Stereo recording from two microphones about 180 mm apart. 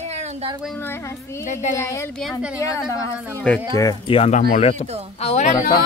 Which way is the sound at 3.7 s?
20° left (ahead or behind).